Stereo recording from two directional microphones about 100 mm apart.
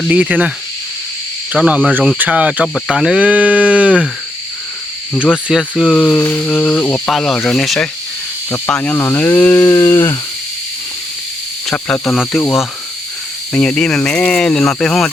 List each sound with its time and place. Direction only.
0.1 s speech: 10° right (ahead or behind)
1.5 s speech: 10° right (ahead or behind)
5.2 s speech: 5° right (ahead or behind)
5.9 s speech: 10° left (ahead or behind)
6.1 s cricket: 20° left (ahead or behind)
6.9 s cricket: 5° left (ahead or behind)
7.4 s speech: 5° left (ahead or behind)
8.4 s cricket: 20° left (ahead or behind)
8.7 s speech: 15° left (ahead or behind)
9.6 s cricket: 30° left (ahead or behind)
11.7 s cricket: 5° left (ahead or behind)
13.5 s speech: 10° left (ahead or behind)